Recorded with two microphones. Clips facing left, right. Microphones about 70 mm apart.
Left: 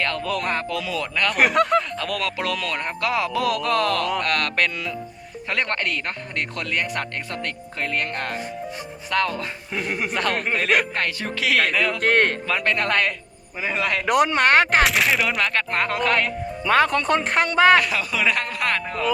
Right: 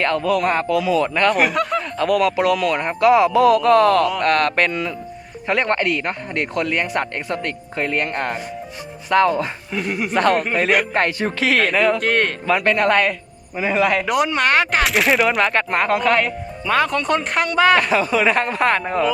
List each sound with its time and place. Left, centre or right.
0.2 s speech: centre
0.9 s speech: right
1.4 s speech: left
2.0 s speech: centre; by 4.9 s right
5.5 s speech: centre
9.7 s speech: left
10.9 s speech: right
11.9 s speech: left
12.5 s a man's voice: centre
14.1 s speech: left
14.8 s a man's voice: centre
16.6 s speech: left
17.7 s speech: right